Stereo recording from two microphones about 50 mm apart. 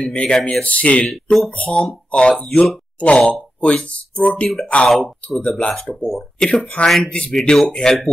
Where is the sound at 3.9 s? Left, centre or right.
Left.